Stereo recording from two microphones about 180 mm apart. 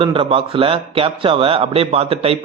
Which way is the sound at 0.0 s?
30° right (ahead or behind).